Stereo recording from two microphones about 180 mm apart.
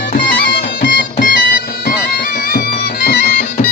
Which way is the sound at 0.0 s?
55° left (ahead or behind).